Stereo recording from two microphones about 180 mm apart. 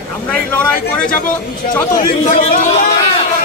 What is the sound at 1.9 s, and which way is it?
Speech, 40° left (ahead or behind).